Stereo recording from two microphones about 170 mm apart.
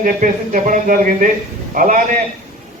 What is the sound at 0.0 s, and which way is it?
A man's voice, 50° right (ahead or behind).